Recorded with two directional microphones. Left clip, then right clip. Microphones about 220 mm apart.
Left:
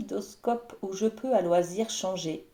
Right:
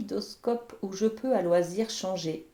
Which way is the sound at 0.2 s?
25° right (ahead or behind).